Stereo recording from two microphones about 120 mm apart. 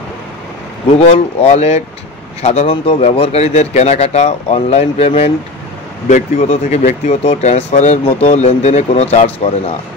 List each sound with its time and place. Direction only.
0.9 s speech: 60° left (ahead or behind)
6.0 s speech: 75° left (ahead or behind)